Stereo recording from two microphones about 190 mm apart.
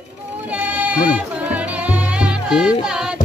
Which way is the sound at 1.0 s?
10° right (ahead or behind).